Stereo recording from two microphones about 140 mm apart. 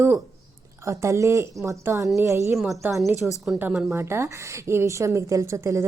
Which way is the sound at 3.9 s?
20° right (ahead or behind).